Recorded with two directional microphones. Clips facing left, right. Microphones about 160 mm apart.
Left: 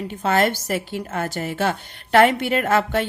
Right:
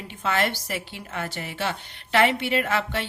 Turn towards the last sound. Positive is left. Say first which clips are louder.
# left 7 dB
turn(degrees=45)  # may be behind; listen again after turning